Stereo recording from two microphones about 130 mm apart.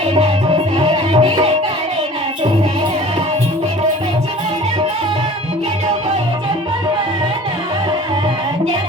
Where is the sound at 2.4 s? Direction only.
40° right (ahead or behind).